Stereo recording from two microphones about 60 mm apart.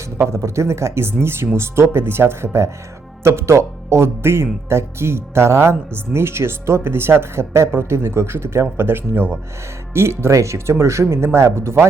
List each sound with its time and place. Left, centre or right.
0.3 s speech: right